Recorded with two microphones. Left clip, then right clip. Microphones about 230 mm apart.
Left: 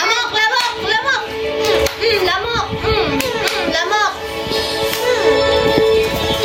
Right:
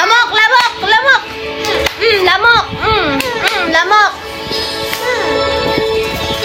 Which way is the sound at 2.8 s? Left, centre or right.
Centre.